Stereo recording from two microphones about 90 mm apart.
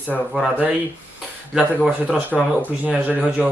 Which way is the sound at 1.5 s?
10° right (ahead or behind).